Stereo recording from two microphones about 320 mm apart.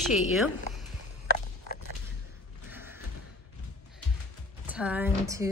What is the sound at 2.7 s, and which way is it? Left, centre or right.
Slam, centre.